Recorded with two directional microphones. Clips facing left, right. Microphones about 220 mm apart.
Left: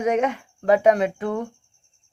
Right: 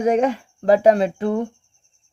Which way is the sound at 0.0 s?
30° right (ahead or behind).